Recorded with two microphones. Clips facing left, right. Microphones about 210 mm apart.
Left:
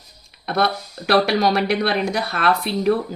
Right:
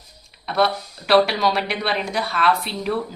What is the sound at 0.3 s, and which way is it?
Speech, 50° left (ahead or behind).